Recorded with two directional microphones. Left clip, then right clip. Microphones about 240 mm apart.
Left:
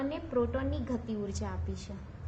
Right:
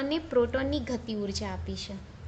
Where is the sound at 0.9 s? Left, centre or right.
Right.